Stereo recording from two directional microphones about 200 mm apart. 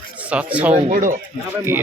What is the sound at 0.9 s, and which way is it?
Speech, 45° right (ahead or behind).